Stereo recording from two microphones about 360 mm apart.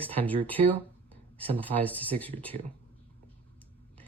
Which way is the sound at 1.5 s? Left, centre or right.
Centre.